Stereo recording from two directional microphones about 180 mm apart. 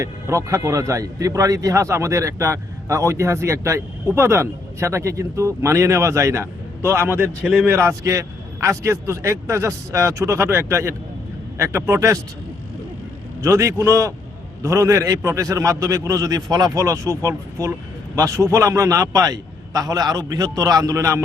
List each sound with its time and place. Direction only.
0.0 s speech: 15° right (ahead or behind)
13.4 s a man's voice: 15° right (ahead or behind)